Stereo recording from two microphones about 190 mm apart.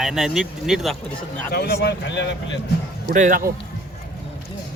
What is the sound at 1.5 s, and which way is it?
Speech, 60° left (ahead or behind).